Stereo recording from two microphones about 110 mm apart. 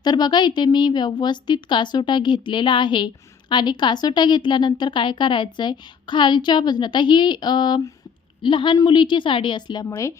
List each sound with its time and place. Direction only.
0.0 s a woman's voice: 40° left (ahead or behind)